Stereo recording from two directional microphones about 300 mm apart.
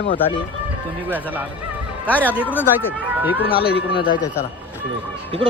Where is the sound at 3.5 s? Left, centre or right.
Left.